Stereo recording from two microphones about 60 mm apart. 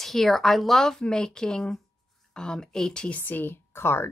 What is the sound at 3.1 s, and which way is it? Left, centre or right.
Speech, left.